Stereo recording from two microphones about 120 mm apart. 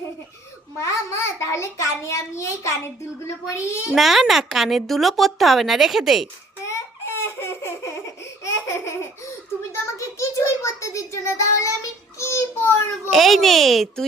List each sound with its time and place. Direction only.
0.8 s a child's voice: 25° left (ahead or behind)
3.9 s speech: centre (ahead or behind)
6.7 s baby laughter: 20° left (ahead or behind)
8.4 s laughter: 25° left (ahead or behind)
9.7 s child singing: 25° left (ahead or behind)
13.1 s speech: centre (ahead or behind)